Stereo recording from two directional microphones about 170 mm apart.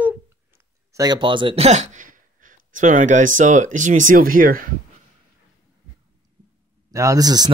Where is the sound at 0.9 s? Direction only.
25° right (ahead or behind); by 4.7 s 55° right (ahead or behind).